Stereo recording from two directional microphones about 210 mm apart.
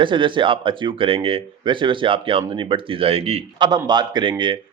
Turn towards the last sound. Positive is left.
turn(degrees=-25)  # may be behind; listen again after turning